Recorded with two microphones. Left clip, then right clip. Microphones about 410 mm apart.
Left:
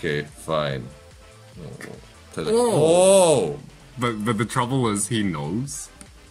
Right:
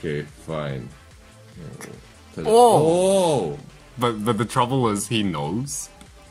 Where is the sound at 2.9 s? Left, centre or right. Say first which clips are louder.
Left 4 dB; left.